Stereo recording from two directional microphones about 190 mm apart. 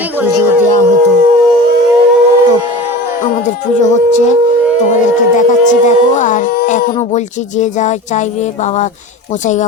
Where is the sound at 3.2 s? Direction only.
40° left (ahead or behind).